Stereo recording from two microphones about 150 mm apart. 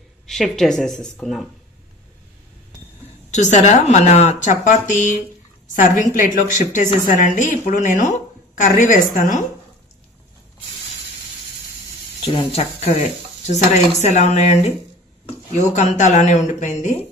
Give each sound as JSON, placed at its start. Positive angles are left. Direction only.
{"t": 0.3, "sound": "speech", "side_deg": 0}
{"t": 3.3, "sound": "a woman's voice", "side_deg": 55}
{"t": 12.2, "sound": "a woman's voice", "side_deg": 35}